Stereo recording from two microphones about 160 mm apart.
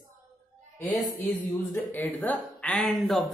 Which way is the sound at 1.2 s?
15° left (ahead or behind).